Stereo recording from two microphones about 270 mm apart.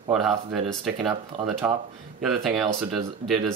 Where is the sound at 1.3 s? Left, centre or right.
Right.